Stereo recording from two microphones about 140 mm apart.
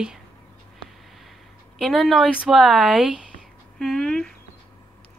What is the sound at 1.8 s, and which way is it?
Speech, centre (ahead or behind).